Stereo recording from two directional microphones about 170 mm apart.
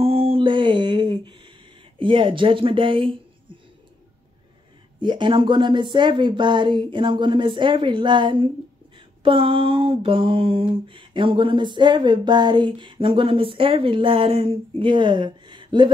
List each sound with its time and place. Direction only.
0.0 s music: 35° right (ahead or behind)
2.0 s speech: 30° right (ahead or behind)
5.0 s a sound: 30° right (ahead or behind)